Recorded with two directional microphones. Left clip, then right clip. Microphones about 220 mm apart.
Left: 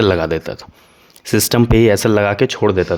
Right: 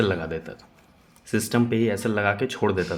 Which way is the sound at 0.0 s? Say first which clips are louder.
Left 10 dB; 50° left (ahead or behind).